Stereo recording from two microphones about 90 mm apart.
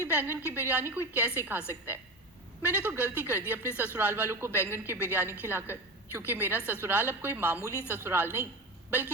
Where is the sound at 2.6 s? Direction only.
20° right (ahead or behind).